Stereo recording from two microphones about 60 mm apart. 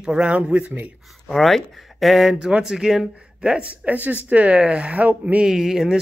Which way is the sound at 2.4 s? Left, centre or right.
Centre.